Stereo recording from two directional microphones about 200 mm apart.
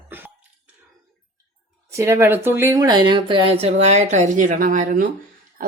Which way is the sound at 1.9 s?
15° right (ahead or behind).